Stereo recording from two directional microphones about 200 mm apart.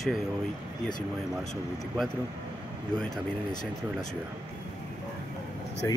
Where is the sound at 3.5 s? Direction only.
20° left (ahead or behind).